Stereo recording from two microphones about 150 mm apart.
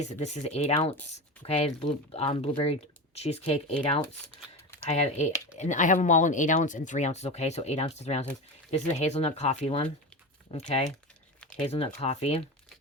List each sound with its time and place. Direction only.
0.0 s speech: 45° left (ahead or behind)
4.9 s speech: 50° left (ahead or behind)